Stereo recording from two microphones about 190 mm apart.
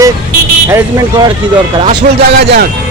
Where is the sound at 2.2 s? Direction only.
55° right (ahead or behind).